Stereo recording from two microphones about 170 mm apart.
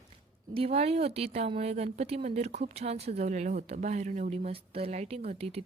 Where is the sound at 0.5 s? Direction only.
35° right (ahead or behind).